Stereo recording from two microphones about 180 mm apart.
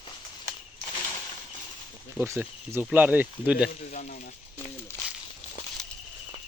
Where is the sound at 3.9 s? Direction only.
40° left (ahead or behind).